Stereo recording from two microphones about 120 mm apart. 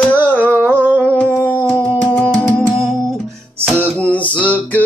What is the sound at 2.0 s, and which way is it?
Music, 10° left (ahead or behind).